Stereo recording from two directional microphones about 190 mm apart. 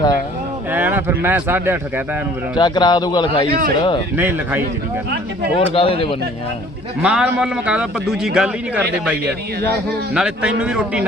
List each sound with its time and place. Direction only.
0.7 s speech: 10° right (ahead or behind)
2.6 s a man's voice: 25° left (ahead or behind)
3.5 s speech: 50° right (ahead or behind)
3.8 s a man's voice: 25° left (ahead or behind)
4.2 s speech: 10° right (ahead or behind)
5.5 s a man's voice: 30° left (ahead or behind)
7.0 s speech: 5° right (ahead or behind)
10.2 s speech: 5° right (ahead or behind)